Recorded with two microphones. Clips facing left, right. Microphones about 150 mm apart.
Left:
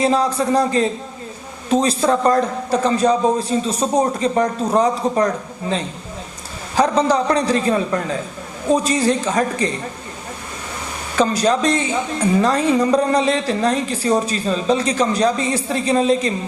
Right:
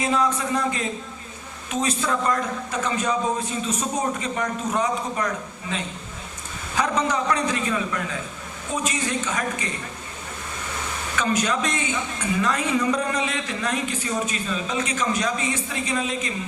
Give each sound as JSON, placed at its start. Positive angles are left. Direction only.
{"t": 0.0, "sound": "a woman's voice", "side_deg": 35}
{"t": 11.2, "sound": "a woman's voice", "side_deg": 35}